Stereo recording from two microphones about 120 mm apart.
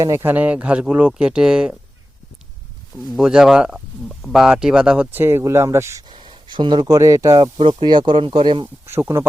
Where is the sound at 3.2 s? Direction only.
5° right (ahead or behind); by 5.9 s 20° right (ahead or behind).